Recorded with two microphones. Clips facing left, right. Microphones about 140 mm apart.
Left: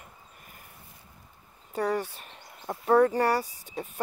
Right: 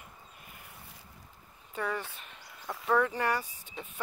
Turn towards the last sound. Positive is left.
turn(degrees=40)  # may be behind; listen again after turning